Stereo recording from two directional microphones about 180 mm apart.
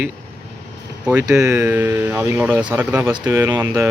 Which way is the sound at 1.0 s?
5° right (ahead or behind).